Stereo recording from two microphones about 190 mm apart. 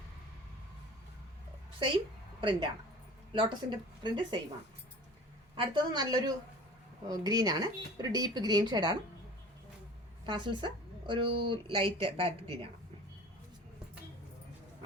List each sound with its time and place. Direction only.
2.4 s a woman's voice: 25° right (ahead or behind)
5.5 s a woman's voice: 20° right (ahead or behind)
10.2 s a woman's voice: 25° right (ahead or behind)